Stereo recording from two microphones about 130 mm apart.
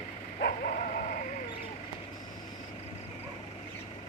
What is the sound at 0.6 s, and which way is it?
Dog, 80° left.